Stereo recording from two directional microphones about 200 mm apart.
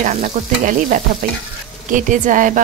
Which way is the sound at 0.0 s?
40° right (ahead or behind).